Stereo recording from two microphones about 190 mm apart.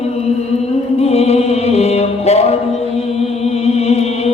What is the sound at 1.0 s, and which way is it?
Music, 35° left (ahead or behind).